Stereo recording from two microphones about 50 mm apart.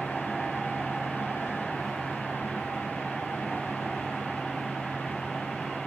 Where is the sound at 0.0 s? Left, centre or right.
Centre.